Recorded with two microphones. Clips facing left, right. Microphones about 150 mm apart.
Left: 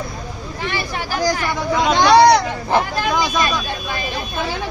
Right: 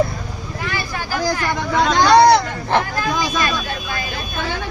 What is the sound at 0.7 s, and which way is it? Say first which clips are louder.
Speech: left 1 dB; 20° left (ahead or behind).